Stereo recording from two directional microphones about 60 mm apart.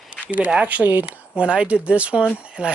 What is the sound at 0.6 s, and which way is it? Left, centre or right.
Speech, right.